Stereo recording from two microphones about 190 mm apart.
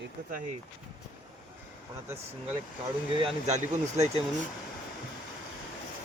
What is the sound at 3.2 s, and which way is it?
Speech, 35° right (ahead or behind).